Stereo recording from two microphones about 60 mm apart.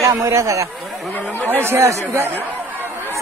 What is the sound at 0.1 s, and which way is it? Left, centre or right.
Speech, right.